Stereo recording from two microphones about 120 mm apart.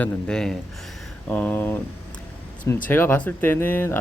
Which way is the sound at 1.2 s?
10° left (ahead or behind).